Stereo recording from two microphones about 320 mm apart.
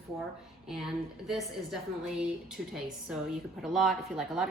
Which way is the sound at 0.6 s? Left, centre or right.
Centre.